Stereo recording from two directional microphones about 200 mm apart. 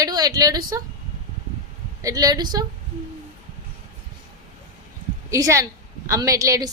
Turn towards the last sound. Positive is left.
turn(degrees=-15)  # may be behind; listen again after turning